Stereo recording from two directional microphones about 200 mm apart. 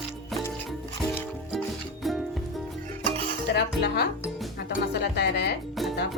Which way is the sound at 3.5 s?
55° left (ahead or behind).